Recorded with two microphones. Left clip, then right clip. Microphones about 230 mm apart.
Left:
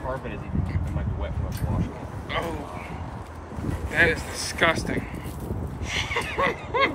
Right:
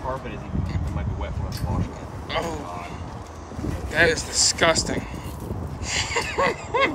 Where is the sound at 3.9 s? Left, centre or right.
Centre.